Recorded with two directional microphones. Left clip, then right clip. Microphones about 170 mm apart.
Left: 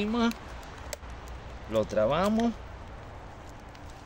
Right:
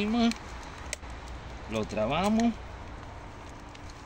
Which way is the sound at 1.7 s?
35° left (ahead or behind).